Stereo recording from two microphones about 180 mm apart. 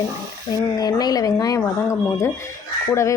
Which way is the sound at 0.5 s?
20° left (ahead or behind).